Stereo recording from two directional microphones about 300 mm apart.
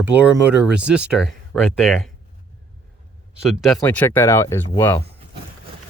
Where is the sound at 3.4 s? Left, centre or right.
Centre.